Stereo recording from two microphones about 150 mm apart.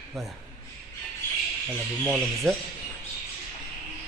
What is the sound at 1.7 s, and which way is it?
Speech, 5° right (ahead or behind).